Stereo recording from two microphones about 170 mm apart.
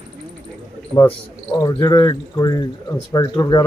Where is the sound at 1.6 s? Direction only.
25° left (ahead or behind).